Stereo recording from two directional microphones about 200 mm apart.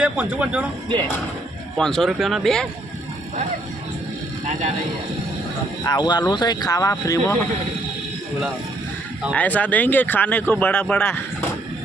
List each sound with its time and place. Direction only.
0.0 s speech: 5° right (ahead or behind)
1.7 s speech: centre (ahead or behind)
5.8 s speech: 20° left (ahead or behind)
9.3 s speech: 10° left (ahead or behind)